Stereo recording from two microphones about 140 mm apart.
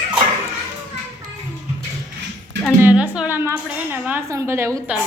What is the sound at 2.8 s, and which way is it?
A woman's voice, 10° right (ahead or behind).